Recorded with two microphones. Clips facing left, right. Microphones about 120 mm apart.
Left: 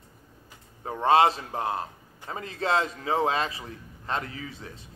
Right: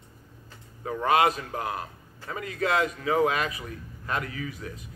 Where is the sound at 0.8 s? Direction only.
30° left (ahead or behind).